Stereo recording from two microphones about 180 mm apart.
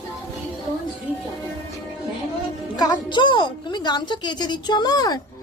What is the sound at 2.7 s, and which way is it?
A woman's voice, 25° left (ahead or behind).